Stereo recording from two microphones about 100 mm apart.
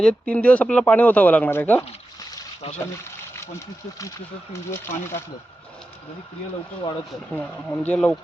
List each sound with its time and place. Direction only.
0.0 s speech: 10° left (ahead or behind)
2.8 s speech: 25° left (ahead or behind)
7.3 s speech: 15° left (ahead or behind)